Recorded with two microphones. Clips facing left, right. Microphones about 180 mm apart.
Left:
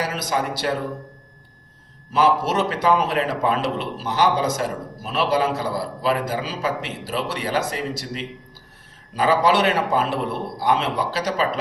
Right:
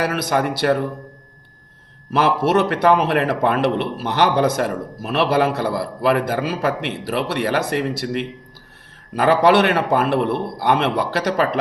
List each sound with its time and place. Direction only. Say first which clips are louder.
0.0 s a man's voice: right 4 dB; 60° right (ahead or behind)
2.1 s a man's voice: right 2 dB; 65° right (ahead or behind)